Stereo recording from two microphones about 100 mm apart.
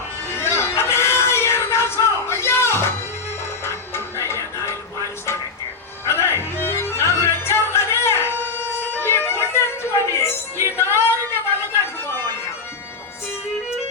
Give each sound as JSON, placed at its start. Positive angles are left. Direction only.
{"t": 0.3, "sound": "music", "side_deg": 25}
{"t": 6.1, "sound": "music", "side_deg": 25}
{"t": 12.0, "sound": "music", "side_deg": 25}